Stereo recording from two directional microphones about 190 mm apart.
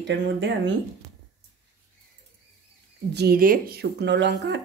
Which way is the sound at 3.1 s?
55° right (ahead or behind).